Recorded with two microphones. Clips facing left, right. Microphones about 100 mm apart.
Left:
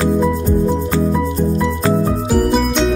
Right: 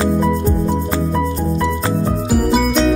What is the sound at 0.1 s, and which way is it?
Music, centre (ahead or behind).